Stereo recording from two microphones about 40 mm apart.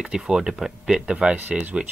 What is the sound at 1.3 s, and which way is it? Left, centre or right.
Speech, right.